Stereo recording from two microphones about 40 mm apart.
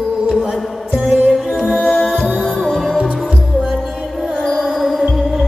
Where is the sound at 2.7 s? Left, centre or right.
Centre.